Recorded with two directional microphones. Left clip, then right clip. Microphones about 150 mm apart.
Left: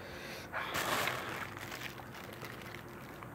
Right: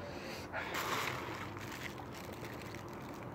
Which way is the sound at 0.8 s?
55° left (ahead or behind).